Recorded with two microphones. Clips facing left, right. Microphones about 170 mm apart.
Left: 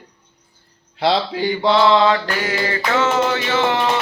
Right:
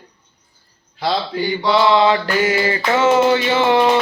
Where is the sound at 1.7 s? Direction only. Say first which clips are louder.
Even; 10° right (ahead or behind).